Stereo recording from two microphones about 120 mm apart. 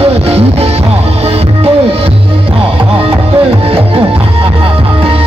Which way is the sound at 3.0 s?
50° right (ahead or behind).